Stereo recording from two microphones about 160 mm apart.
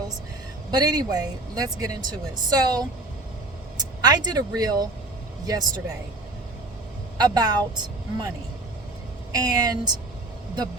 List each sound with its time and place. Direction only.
0.7 s speech: 25° right (ahead or behind)
4.0 s speech: 25° right (ahead or behind)
7.2 s speech: 25° right (ahead or behind)
9.3 s speech: 25° right (ahead or behind)